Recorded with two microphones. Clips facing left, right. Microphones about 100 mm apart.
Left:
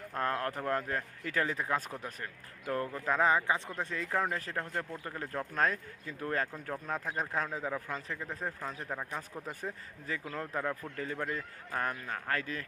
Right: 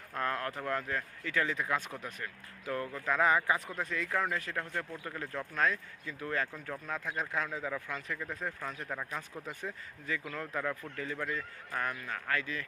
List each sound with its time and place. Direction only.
0.1 s speech: 35° left (ahead or behind)
10.9 s speech: 40° left (ahead or behind)